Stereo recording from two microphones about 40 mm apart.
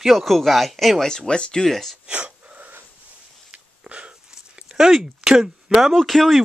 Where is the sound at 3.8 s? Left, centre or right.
Right.